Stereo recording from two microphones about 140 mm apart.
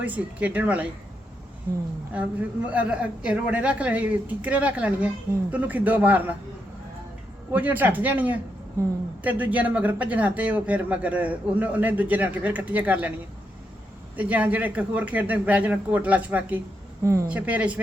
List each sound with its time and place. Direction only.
0.0 s speech: 10° right (ahead or behind)
2.1 s speech: 10° right (ahead or behind)
7.5 s speech: 10° right (ahead or behind)
14.2 s speech: 10° right (ahead or behind)
17.2 s speech: 10° right (ahead or behind)